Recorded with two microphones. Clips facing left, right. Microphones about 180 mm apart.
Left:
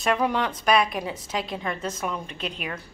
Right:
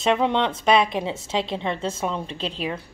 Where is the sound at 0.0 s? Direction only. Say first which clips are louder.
Right 3 dB; 25° right (ahead or behind).